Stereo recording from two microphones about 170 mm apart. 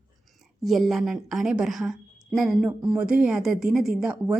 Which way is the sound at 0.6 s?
Centre (ahead or behind).